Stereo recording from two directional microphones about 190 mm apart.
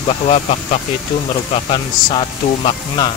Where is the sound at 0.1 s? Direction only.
35° left (ahead or behind).